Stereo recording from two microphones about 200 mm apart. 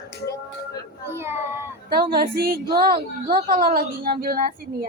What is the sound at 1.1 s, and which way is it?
Child singing, 15° right (ahead or behind).